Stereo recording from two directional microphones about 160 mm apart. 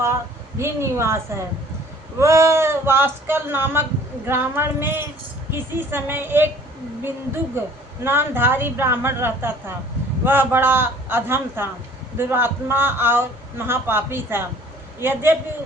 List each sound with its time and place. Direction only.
0.6 s a woman's voice: 15° right (ahead or behind)